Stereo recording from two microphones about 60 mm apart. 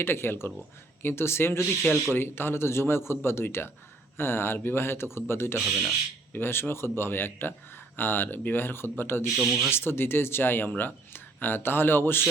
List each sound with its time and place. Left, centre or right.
0.0 s a man's voice: left
5.5 s speech: centre
6.3 s speech: left